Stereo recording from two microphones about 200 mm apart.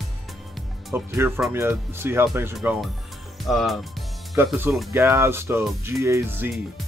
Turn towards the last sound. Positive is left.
turn(degrees=-15)  # may be behind; listen again after turning